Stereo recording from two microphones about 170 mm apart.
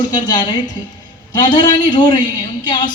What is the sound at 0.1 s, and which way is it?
Music, 25° left (ahead or behind).